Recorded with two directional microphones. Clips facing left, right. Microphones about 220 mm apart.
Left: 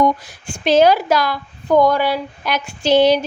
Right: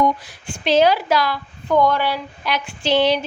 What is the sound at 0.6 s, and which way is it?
A woman's voice, 45° left (ahead or behind).